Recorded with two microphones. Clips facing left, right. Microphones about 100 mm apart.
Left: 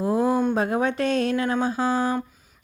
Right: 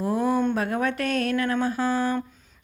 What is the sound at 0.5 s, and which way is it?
Speech, 20° left (ahead or behind).